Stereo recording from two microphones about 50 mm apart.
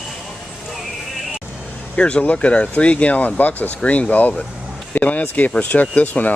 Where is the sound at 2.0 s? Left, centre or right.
Left.